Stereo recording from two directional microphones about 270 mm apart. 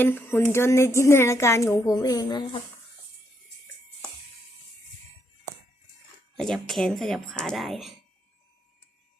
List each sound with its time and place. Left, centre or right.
0.0 s speech: centre
6.3 s speech: centre